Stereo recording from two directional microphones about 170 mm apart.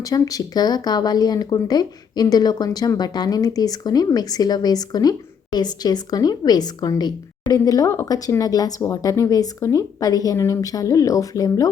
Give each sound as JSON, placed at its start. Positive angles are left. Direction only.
{"t": 0.0, "sound": "speech", "side_deg": 20}